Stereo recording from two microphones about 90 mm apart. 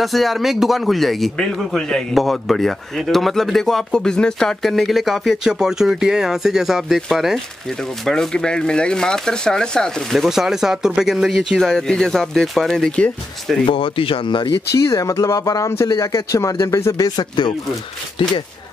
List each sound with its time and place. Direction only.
0.0 s a man's voice: centre (ahead or behind)
11.5 s speech: 5° left (ahead or behind)
13.7 s speech: 75° left (ahead or behind)
14.8 s speech: 35° left (ahead or behind)
17.2 s speech: 55° left (ahead or behind)